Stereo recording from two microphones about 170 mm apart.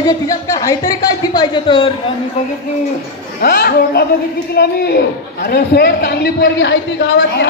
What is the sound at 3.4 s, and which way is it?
A child's voice, 60° left (ahead or behind).